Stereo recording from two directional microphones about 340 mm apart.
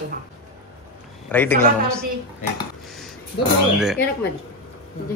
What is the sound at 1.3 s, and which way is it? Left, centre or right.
Speech, centre.